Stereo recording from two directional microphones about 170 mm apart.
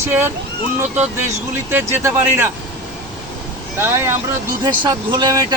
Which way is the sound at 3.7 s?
15° right (ahead or behind).